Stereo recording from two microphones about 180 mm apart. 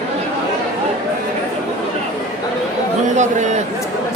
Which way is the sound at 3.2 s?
40° right (ahead or behind).